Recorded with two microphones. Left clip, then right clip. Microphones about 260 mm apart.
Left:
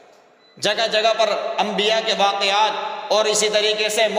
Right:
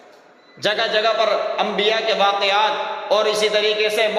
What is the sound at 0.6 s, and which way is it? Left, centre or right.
A man's voice, left.